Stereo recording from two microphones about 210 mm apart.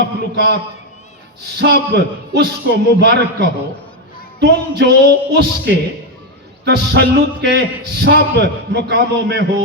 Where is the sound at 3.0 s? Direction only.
55° right (ahead or behind).